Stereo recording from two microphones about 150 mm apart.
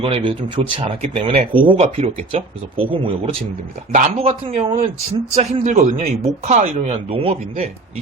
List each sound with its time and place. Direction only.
0.0 s a man's voice: 35° right (ahead or behind)